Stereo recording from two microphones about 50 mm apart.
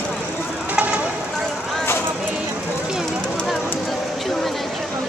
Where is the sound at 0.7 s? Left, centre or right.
Right.